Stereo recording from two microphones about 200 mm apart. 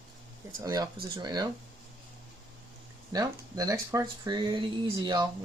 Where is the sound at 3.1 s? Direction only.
15° right (ahead or behind).